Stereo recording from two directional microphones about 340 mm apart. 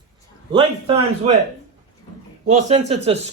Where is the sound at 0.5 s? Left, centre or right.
Centre.